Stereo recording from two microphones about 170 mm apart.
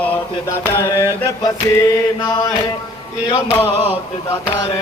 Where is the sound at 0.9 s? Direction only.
15° right (ahead or behind).